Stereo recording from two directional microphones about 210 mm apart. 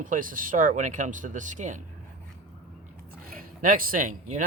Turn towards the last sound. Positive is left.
turn(degrees=-40)  # may be behind; listen again after turning